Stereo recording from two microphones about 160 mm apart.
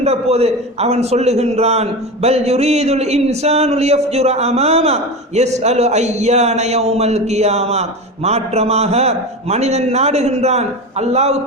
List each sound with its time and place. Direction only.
0.0 s a man's voice: 40° right (ahead or behind)